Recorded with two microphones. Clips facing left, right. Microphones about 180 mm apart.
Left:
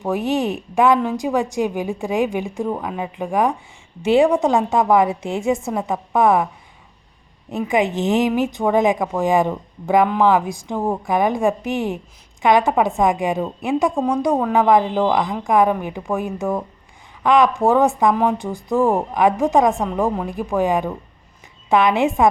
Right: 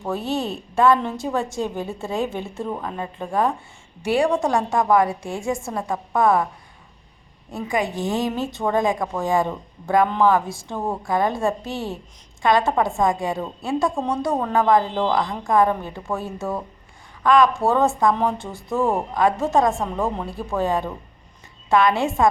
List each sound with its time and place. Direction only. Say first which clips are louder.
0.0 s a woman's voice: left 5 dB; 15° left (ahead or behind)
7.5 s a woman's voice: left 5 dB; 20° left (ahead or behind)